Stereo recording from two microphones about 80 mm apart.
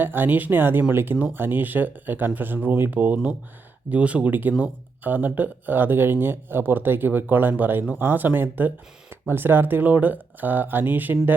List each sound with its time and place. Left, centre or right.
0.0 s speech: right